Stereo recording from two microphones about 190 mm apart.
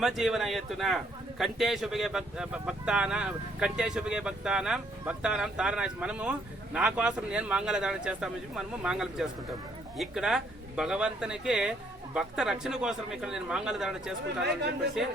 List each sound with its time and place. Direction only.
0.0 s speech: centre (ahead or behind)